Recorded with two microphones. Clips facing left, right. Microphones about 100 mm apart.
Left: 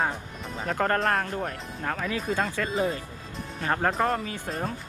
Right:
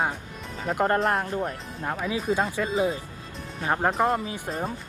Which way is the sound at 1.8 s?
15° right (ahead or behind).